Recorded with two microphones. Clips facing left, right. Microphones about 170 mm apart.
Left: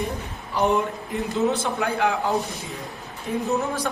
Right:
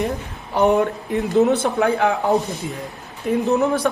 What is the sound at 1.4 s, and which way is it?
Speech, 60° right (ahead or behind).